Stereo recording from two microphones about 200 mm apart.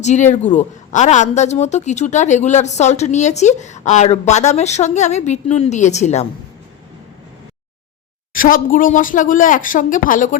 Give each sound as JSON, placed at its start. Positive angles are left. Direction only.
{"t": 0.0, "sound": "a woman's voice", "side_deg": 35}
{"t": 8.3, "sound": "a woman's voice", "side_deg": 45}